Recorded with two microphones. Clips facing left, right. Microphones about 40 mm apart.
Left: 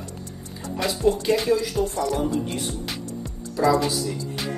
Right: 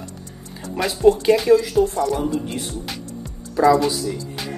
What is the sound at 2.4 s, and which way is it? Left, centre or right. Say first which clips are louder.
Music: right 1 dB; centre.